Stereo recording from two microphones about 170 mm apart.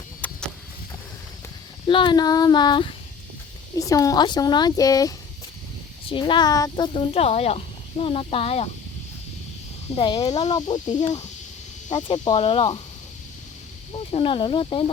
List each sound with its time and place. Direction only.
0.2 s a sound: 10° left (ahead or behind)
1.9 s speech: 30° left (ahead or behind)
9.9 s speech: 30° left (ahead or behind)
10.2 s speech: 40° left (ahead or behind)
12.0 s speech: 30° left (ahead or behind)
13.9 s speech: 30° left (ahead or behind)